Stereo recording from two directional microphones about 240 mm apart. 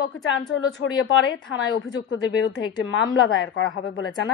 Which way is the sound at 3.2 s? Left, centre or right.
Left.